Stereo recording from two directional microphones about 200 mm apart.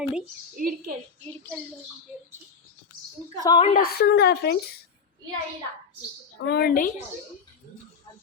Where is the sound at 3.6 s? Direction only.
45° left (ahead or behind).